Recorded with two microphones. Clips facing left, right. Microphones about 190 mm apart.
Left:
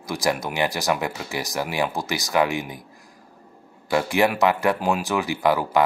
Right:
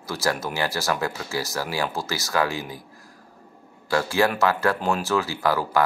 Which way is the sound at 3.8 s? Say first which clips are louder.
Left 1 dB; 20° left (ahead or behind).